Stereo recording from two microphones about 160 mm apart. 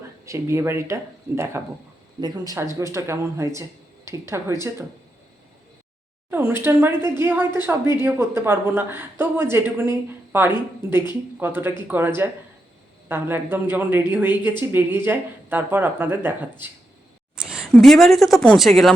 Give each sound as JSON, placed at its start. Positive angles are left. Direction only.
{"t": 0.3, "sound": "a woman's voice", "side_deg": -20}
{"t": 6.3, "sound": "a woman's voice", "side_deg": -15}